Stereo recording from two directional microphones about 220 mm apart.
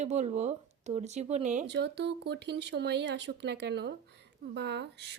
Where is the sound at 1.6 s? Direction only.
50° right (ahead or behind).